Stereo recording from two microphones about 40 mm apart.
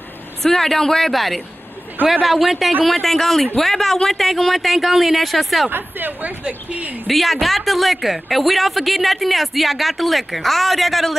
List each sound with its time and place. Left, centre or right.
0.4 s speech: centre
5.7 s speech: right
6.2 s speech: right
7.1 s speech: centre